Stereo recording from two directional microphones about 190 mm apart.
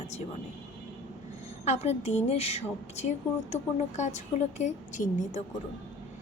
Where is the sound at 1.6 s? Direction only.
35° left (ahead or behind).